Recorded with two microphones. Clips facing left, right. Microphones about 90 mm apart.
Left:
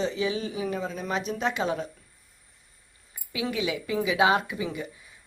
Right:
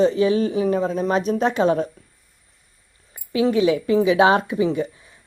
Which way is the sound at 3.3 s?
35° right (ahead or behind).